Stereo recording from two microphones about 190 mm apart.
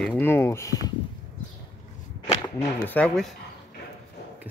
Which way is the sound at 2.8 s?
5° left (ahead or behind).